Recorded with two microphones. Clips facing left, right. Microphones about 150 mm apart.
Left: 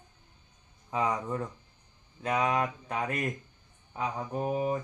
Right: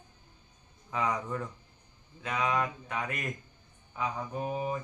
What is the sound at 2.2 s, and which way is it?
Speech, 40° left (ahead or behind).